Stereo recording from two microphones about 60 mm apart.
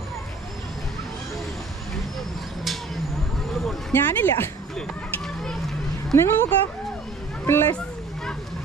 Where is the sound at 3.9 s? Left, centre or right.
Left.